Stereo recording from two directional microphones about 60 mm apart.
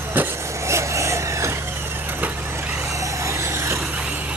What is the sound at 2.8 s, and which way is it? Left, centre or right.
Vehicle, right.